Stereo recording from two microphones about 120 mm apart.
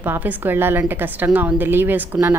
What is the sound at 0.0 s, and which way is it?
A woman's voice, 15° right (ahead or behind).